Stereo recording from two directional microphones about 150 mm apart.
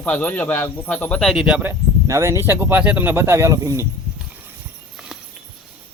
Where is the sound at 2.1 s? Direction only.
20° right (ahead or behind).